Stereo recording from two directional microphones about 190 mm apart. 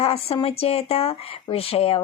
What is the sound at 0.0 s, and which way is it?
A woman's voice, 30° left (ahead or behind).